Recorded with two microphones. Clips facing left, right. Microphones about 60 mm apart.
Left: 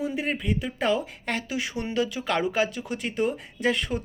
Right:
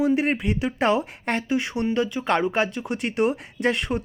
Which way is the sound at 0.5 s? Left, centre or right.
Right.